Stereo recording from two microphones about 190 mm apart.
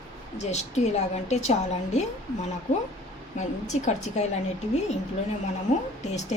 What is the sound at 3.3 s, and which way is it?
Speech, 40° left (ahead or behind).